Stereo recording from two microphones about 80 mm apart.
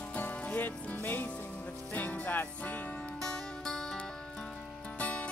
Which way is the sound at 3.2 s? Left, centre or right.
Centre.